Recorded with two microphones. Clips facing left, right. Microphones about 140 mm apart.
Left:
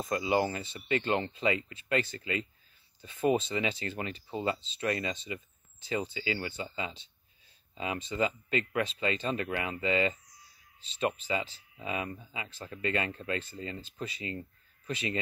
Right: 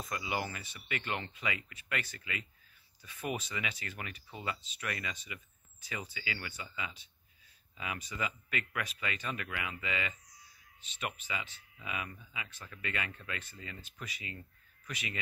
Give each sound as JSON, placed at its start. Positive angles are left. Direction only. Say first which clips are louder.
{"t": 0.0, "sound": "speech", "louder": "left 9 dB", "side_deg": 30}